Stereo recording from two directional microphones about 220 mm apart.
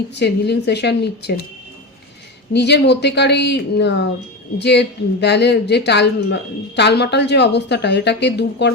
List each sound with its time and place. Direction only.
0.2 s speech: 50° left (ahead or behind)
2.5 s speech: 50° left (ahead or behind)